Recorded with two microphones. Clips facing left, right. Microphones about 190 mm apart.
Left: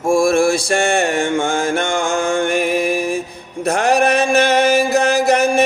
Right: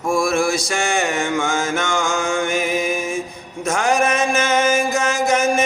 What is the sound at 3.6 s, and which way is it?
Mantra, 60° left (ahead or behind).